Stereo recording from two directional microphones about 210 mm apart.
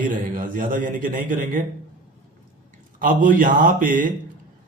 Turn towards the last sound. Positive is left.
turn(degrees=-40)  # may be behind; listen again after turning